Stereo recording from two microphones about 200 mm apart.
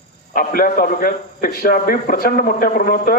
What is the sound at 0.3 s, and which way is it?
A man's voice, 45° left (ahead or behind).